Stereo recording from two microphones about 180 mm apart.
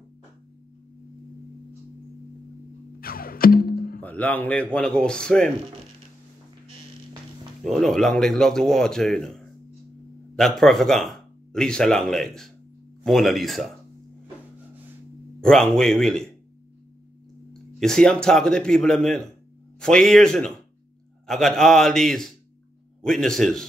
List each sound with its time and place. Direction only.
3.0 s music: 55° left (ahead or behind)
4.0 s a man's voice: 10° left (ahead or behind)
7.6 s a man's voice: centre (ahead or behind)
15.4 s a man's voice: 5° left (ahead or behind)
17.5 s a man's voice: 5° left (ahead or behind)